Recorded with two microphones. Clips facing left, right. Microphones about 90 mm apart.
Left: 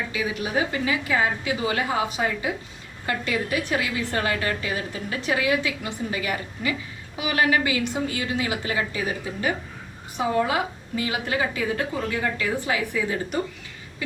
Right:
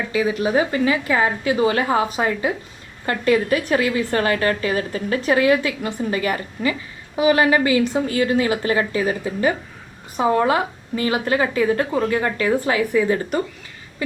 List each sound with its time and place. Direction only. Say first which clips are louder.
0.1 s a woman's voice: right 10 dB; 35° right (ahead or behind)